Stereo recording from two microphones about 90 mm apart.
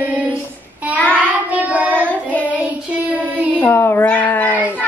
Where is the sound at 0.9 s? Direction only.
15° left (ahead or behind).